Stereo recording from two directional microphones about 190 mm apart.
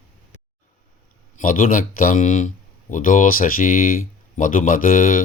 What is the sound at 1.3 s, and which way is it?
Speech, 45° left (ahead or behind).